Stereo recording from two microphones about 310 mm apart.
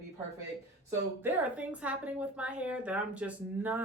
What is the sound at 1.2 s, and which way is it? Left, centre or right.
A woman's voice, centre.